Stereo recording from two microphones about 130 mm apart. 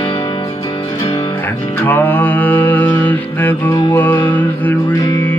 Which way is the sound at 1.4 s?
15° left (ahead or behind).